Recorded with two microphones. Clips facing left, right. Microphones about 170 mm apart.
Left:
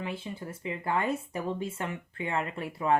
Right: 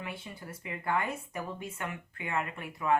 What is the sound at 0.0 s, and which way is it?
Speech, 25° left (ahead or behind).